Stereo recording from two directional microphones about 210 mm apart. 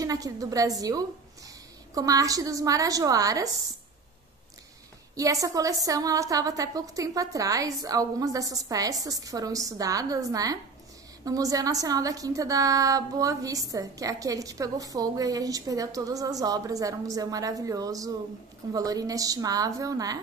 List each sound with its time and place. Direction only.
0.0 s a woman's voice: 15° right (ahead or behind)
5.1 s a woman's voice: 15° right (ahead or behind)